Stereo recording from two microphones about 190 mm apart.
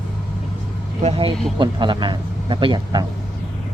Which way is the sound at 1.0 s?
30° right (ahead or behind).